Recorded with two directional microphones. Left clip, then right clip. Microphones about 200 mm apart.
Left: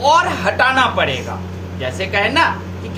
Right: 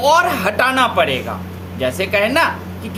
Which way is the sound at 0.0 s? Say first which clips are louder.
Even; 55° right (ahead or behind).